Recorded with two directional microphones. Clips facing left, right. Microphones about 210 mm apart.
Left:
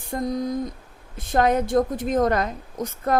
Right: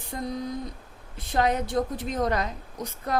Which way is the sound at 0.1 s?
45° left (ahead or behind).